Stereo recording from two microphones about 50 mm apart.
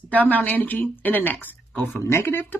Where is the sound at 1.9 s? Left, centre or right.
Left.